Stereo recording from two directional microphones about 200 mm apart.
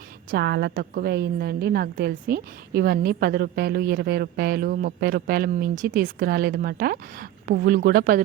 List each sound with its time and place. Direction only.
0.3 s a woman's voice: 55° right (ahead or behind)